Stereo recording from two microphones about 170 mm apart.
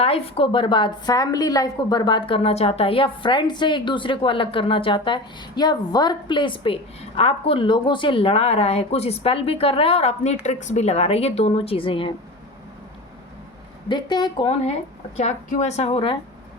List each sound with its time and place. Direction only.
0.0 s a woman's voice: 35° left (ahead or behind)
13.8 s a woman's voice: 25° left (ahead or behind)
15.1 s speech: 45° left (ahead or behind)